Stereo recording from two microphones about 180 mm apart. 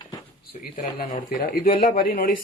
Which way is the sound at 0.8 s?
50° left (ahead or behind).